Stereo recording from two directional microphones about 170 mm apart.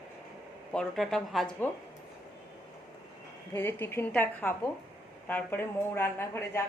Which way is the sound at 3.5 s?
15° left (ahead or behind).